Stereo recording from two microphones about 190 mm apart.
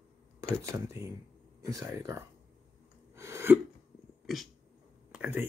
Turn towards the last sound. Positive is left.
turn(degrees=-10)  # may be behind; listen again after turning